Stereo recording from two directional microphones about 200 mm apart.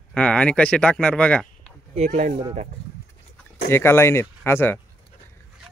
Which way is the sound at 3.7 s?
10° left (ahead or behind).